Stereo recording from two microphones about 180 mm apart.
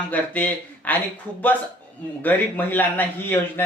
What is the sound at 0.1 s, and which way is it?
Speech, 10° left (ahead or behind).